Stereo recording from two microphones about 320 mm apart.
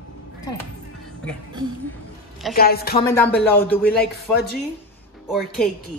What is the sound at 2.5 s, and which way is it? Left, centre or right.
Speech, left.